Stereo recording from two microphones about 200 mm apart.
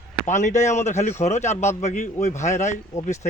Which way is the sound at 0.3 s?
35° left (ahead or behind).